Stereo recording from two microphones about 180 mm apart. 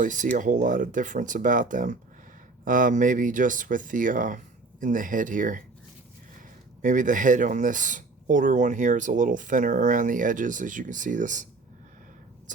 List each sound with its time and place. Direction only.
0.0 s speech: 45° right (ahead or behind)
6.8 s speech: 45° right (ahead or behind)